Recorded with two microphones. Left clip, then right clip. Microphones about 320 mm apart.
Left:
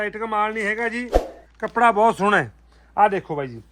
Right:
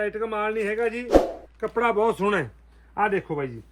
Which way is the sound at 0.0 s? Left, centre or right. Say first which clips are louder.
Left 3 dB; left.